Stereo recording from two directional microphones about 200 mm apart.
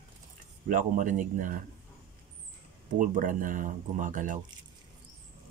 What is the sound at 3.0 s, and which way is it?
Speech, 40° right (ahead or behind).